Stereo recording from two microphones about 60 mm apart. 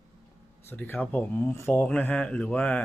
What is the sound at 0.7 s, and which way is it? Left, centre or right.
Speech, left.